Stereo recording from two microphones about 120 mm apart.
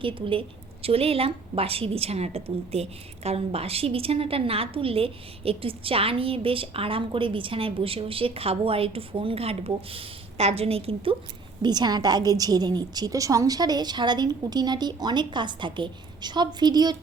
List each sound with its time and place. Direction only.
0.0 s a woman's voice: 45° right (ahead or behind)
11.6 s a woman's voice: 35° right (ahead or behind)